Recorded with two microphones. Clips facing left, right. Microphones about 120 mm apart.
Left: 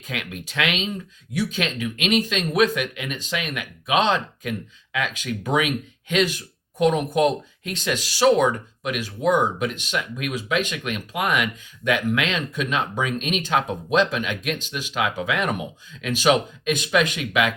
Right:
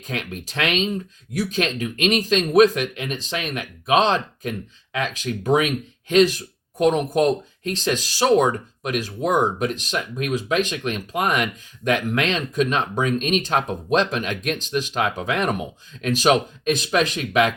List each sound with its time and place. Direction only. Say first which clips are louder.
0.1 s speech: right 2 dB; 35° right (ahead or behind)